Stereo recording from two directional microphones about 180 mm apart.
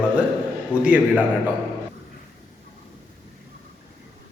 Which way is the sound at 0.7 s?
5° right (ahead or behind).